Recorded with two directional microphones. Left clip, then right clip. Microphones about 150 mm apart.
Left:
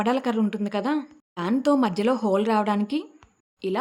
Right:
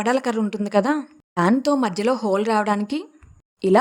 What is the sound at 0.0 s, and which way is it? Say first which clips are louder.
A woman's voice: right 3 dB; 50° right (ahead or behind).